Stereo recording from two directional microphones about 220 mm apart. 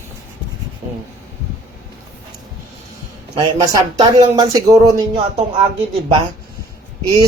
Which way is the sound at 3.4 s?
20° right (ahead or behind).